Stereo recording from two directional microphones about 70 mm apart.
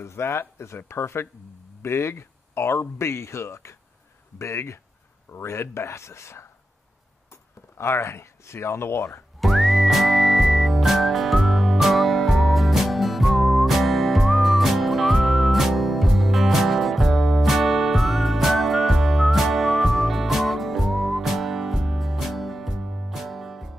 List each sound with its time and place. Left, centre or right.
0.0 s speech: left
9.4 s whistling: centre